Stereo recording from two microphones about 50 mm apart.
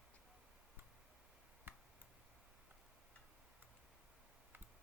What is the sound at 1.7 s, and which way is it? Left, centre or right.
Tick, right.